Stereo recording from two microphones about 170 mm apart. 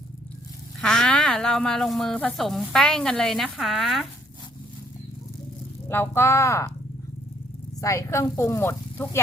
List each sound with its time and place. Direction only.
0.8 s speech: 5° left (ahead or behind)
5.9 s a woman's voice: 15° left (ahead or behind)
7.8 s a woman's voice: 15° left (ahead or behind)